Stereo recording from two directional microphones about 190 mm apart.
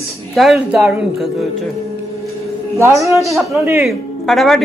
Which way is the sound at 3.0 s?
15° right (ahead or behind).